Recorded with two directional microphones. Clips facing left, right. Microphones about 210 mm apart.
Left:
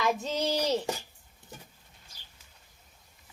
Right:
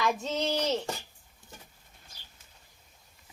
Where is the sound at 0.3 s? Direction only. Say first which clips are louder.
Left 1 dB; 15° left (ahead or behind).